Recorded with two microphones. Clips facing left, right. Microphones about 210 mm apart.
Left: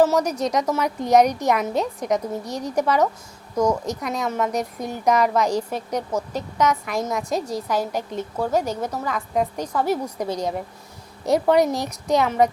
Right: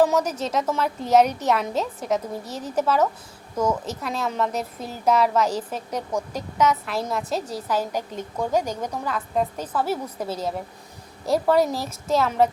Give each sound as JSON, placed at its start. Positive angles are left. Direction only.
{"t": 0.0, "sound": "a woman's voice", "side_deg": 10}